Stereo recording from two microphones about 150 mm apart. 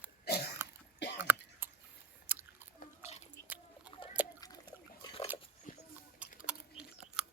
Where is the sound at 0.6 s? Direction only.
15° right (ahead or behind).